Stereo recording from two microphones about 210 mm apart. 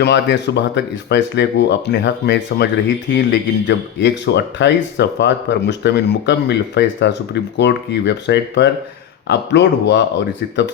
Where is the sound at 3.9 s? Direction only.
55° left (ahead or behind).